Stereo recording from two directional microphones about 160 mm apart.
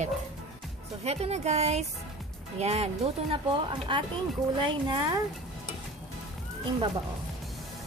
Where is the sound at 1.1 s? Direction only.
40° right (ahead or behind).